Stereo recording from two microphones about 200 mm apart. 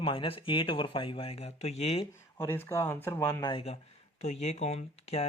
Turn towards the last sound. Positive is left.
turn(degrees=30)  # may be behind; listen again after turning